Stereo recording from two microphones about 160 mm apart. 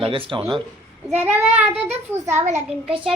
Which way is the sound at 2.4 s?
45° right (ahead or behind).